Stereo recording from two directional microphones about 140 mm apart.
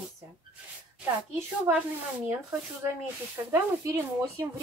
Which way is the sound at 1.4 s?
10° right (ahead or behind).